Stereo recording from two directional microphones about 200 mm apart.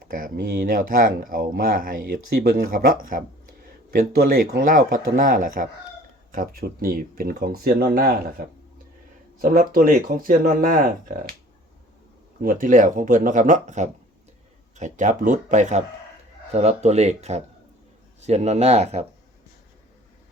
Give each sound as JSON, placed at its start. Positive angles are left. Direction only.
{"t": 0.1, "sound": "speech", "side_deg": -45}
{"t": 12.4, "sound": "speech", "side_deg": -45}